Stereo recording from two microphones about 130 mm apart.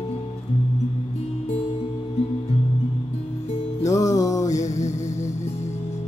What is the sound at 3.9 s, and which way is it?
Music, 25° left (ahead or behind).